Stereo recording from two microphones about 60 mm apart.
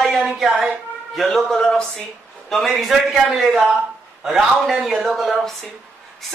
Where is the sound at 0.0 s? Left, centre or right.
Centre.